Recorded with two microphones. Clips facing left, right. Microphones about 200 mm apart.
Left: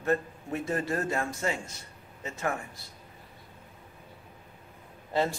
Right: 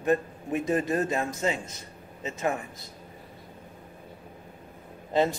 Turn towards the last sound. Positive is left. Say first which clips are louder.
# right 4 dB
turn(degrees=-20)  # may be behind; listen again after turning